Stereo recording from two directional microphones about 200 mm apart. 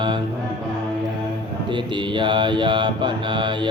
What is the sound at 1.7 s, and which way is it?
Music, 25° right (ahead or behind).